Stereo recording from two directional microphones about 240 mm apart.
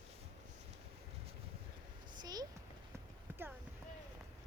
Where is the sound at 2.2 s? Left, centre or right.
Centre.